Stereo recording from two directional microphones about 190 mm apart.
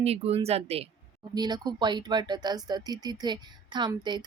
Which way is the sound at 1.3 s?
20° right (ahead or behind).